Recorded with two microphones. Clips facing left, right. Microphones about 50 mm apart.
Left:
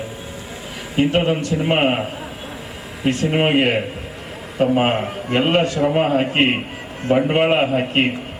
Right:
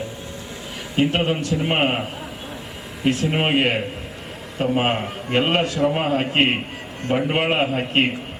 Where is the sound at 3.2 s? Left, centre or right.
Centre.